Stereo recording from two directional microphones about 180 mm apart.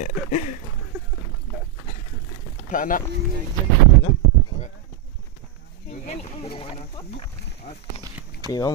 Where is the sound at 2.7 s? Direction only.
50° left (ahead or behind).